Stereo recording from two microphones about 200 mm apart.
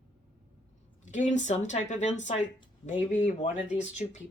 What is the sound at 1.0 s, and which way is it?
Speech, 35° left (ahead or behind).